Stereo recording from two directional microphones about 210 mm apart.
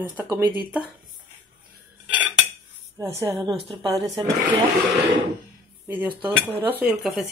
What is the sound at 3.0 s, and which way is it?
A woman's voice, 15° right (ahead or behind).